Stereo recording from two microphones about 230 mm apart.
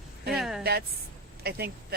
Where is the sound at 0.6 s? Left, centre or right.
Right.